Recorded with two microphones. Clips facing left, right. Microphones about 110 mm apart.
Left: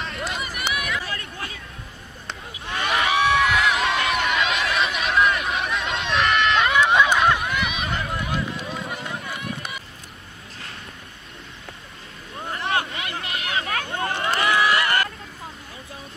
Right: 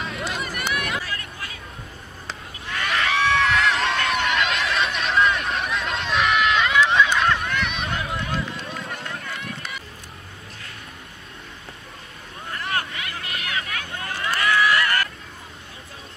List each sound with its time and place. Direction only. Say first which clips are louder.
0.0 s run: right 1 dB; centre (ahead or behind)
1.0 s hubbub: left 1 dB; 30° left (ahead or behind)
2.7 s goose: left 2 dB; 20° left (ahead or behind)
3.3 s a sound: even; 5° left (ahead or behind)
7.2 s run: left 1 dB; 5° left (ahead or behind)
9.2 s run: left 2 dB; 15° left (ahead or behind)
12.4 s a sound: left 3 dB; 25° left (ahead or behind)